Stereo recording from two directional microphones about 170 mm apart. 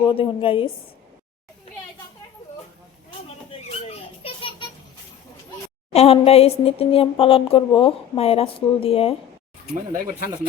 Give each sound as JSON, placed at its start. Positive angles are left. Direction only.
{"t": 0.1, "sound": "speech", "side_deg": 30}
{"t": 3.5, "sound": "children playing", "side_deg": 35}
{"t": 5.9, "sound": "speech", "side_deg": 35}